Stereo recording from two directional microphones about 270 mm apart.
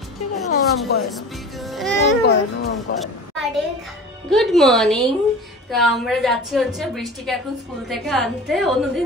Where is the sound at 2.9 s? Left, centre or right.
Left.